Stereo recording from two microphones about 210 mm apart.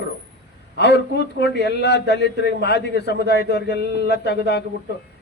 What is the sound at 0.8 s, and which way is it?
A man's voice, 55° left (ahead or behind).